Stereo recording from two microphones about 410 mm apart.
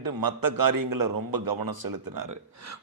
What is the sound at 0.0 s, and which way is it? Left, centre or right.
A man's voice, right.